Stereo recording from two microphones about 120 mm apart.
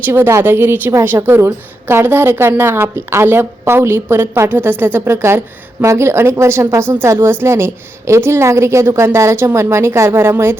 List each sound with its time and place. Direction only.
0.0 s a woman's voice: 20° right (ahead or behind)